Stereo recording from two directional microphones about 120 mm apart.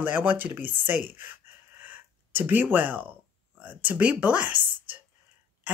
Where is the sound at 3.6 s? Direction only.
15° right (ahead or behind).